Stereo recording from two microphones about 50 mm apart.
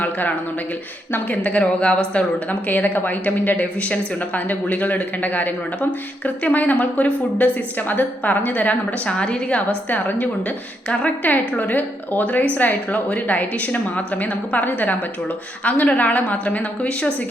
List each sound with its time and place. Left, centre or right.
0.0 s a woman's voice: left; by 2.2 s centre
2.5 s a woman's voice: left
9.9 s a woman's voice: left